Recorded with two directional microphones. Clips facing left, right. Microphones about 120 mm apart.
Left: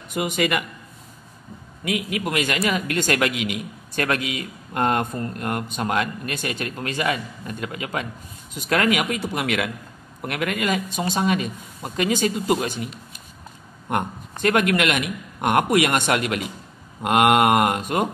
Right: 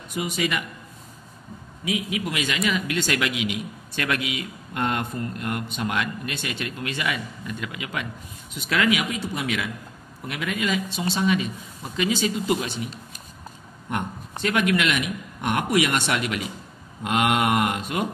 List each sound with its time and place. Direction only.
0.1 s speech: 55° left (ahead or behind)
1.9 s a man's voice: 55° left (ahead or behind)
14.4 s a man's voice: 50° left (ahead or behind)